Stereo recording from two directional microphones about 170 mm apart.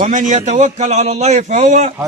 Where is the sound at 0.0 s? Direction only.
45° right (ahead or behind).